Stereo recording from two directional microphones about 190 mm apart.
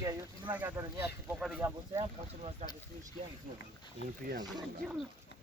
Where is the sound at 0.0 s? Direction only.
15° right (ahead or behind).